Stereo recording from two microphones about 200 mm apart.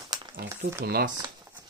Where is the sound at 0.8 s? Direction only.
50° right (ahead or behind).